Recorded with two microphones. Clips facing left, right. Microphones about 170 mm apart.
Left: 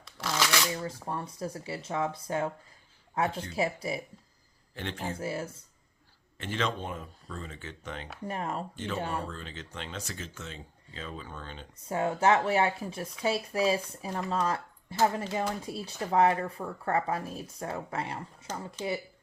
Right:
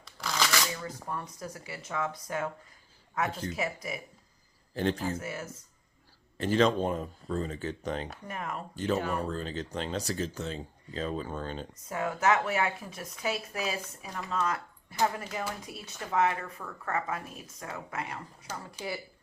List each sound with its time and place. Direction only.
0.0 s shuffling cards: centre (ahead or behind)
0.9 s speech: 30° left (ahead or behind)
3.5 s speech: 30° left (ahead or behind)
4.7 s a man's voice: 35° right (ahead or behind)
4.9 s speech: 30° left (ahead or behind)
6.3 s speech: 40° right (ahead or behind)
8.3 s speech: 30° left (ahead or behind)
8.7 s speech: 40° right (ahead or behind)
11.8 s speech: 30° left (ahead or behind)